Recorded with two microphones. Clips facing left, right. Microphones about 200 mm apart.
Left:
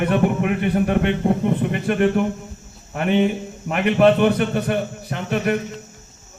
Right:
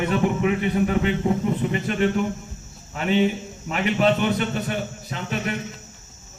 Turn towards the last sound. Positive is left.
turn(degrees=55)  # may be behind; listen again after turning